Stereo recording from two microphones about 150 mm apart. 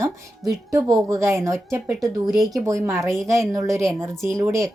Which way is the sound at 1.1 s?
20° right (ahead or behind).